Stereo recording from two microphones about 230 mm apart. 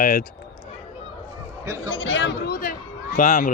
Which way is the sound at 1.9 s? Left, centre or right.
Left.